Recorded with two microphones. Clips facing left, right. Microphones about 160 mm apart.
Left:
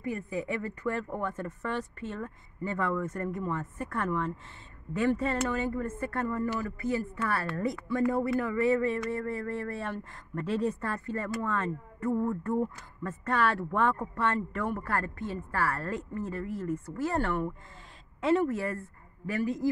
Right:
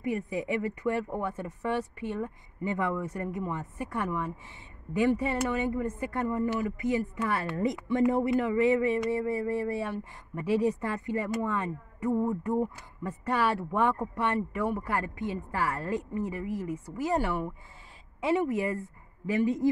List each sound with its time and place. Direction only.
0.0 s a woman's voice: 20° right (ahead or behind)